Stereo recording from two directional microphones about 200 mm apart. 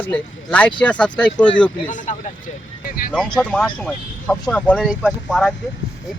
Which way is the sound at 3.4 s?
5° left (ahead or behind).